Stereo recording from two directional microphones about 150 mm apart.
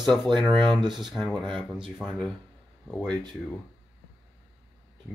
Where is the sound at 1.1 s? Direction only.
Centre (ahead or behind).